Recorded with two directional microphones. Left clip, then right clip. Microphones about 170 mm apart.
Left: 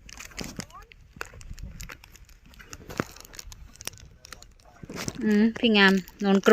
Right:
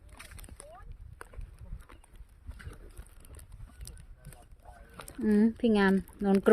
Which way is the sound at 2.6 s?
45° left (ahead or behind).